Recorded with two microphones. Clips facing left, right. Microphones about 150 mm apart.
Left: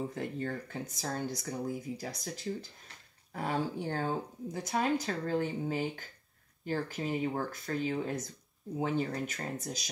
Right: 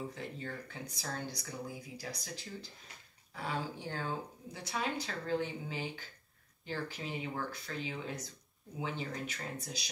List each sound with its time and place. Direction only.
0.1 s speech: 50° left (ahead or behind)